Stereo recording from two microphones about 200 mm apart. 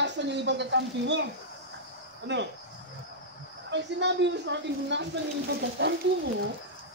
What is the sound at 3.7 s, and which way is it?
A man's voice, 60° right (ahead or behind).